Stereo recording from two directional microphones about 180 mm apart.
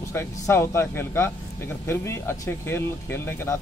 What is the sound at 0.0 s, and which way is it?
A man's voice, 15° left (ahead or behind).